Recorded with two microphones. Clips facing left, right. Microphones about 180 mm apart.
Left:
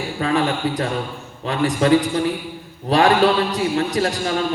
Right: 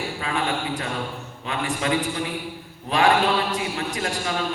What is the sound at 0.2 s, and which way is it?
A man's voice, 35° left (ahead or behind).